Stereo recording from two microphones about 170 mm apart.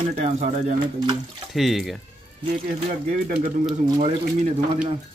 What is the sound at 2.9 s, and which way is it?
Speech, 55° right (ahead or behind).